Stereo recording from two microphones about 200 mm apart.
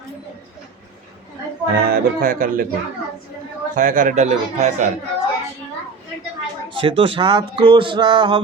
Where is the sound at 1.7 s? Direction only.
45° right (ahead or behind).